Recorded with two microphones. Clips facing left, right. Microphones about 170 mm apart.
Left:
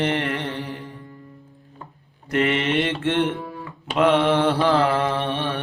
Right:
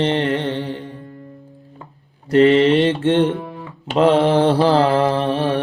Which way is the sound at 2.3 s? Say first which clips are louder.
Right 9 dB; 35° right (ahead or behind).